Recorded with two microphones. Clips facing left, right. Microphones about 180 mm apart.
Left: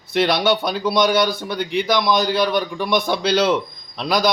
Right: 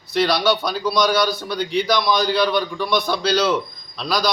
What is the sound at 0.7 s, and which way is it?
A man's voice, 55° left (ahead or behind).